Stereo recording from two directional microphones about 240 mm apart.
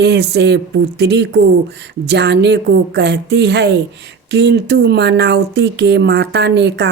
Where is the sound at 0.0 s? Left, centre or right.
Right.